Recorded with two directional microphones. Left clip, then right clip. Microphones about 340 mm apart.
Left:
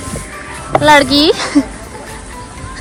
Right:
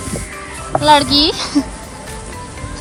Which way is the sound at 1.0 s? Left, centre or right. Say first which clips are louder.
Left 3 dB; centre.